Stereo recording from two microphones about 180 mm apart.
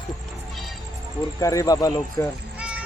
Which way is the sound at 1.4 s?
20° left (ahead or behind).